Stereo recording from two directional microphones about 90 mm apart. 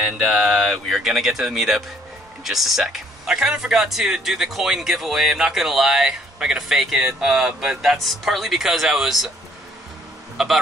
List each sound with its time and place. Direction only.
0.0 s speech: centre (ahead or behind)
10.3 s speech: 5° right (ahead or behind)